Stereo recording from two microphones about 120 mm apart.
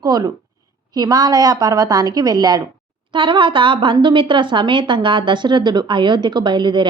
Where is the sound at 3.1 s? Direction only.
45° right (ahead or behind).